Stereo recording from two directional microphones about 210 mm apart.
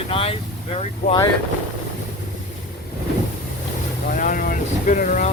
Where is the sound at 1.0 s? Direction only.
45° left (ahead or behind).